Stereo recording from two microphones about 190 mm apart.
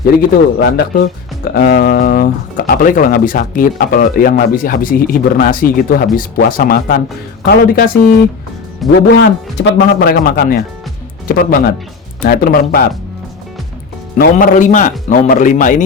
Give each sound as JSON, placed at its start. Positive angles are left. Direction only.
{"t": 0.0, "sound": "speech", "side_deg": 55}
{"t": 8.8, "sound": "a man's voice", "side_deg": 0}
{"t": 9.1, "sound": "speech", "side_deg": 65}
{"t": 14.2, "sound": "speech", "side_deg": 45}